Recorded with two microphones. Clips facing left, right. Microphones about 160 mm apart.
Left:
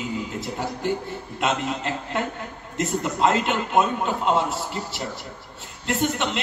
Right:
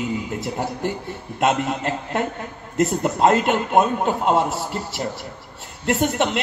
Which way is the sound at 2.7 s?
50° right (ahead or behind).